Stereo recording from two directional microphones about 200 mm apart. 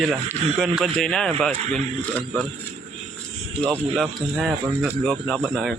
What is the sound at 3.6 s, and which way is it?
Speech, centre (ahead or behind).